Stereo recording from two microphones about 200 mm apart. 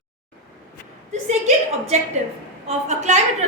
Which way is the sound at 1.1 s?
35° right (ahead or behind).